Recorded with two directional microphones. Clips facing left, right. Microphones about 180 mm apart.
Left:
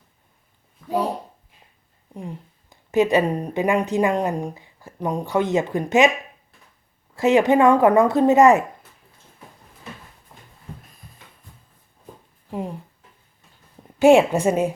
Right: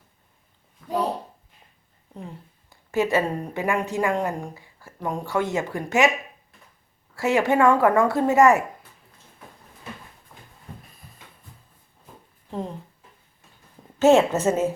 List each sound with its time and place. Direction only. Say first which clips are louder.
2.1 s a woman's voice: left 4 dB; 15° left (ahead or behind)
7.2 s a woman's voice: left 4 dB; 20° left (ahead or behind)
12.5 s a sound: left 2 dB; 10° left (ahead or behind)
14.0 s a woman's voice: left 3 dB; 15° left (ahead or behind)